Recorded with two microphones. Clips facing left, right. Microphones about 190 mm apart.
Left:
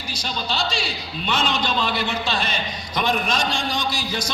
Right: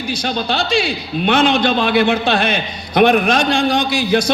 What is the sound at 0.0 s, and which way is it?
A man's voice, 60° right (ahead or behind).